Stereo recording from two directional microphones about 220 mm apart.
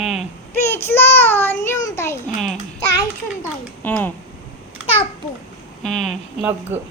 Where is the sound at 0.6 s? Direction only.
10° left (ahead or behind).